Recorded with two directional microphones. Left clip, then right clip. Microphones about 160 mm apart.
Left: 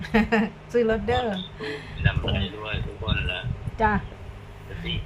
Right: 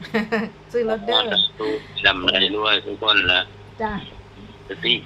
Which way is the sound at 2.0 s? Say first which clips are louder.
Right 12 dB; 90° right.